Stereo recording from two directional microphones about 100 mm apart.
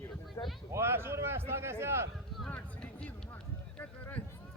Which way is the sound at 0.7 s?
25° right (ahead or behind).